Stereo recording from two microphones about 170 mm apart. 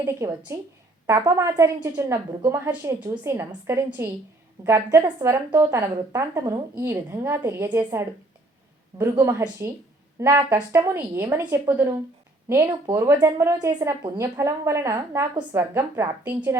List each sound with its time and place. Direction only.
0.0 s a woman's voice: 15° right (ahead or behind)
9.0 s a woman's voice: 15° right (ahead or behind)